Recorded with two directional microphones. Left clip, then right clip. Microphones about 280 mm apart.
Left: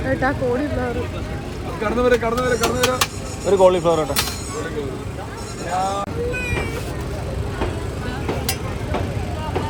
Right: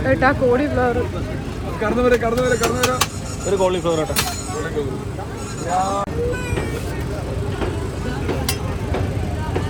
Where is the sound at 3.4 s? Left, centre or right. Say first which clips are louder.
Left 4 dB; left.